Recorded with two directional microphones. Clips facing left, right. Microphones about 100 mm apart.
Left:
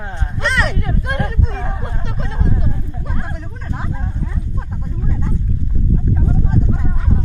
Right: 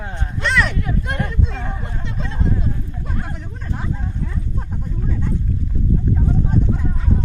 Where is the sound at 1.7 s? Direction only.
25° left (ahead or behind).